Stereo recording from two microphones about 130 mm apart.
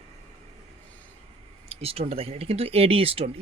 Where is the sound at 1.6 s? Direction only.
50° right (ahead or behind).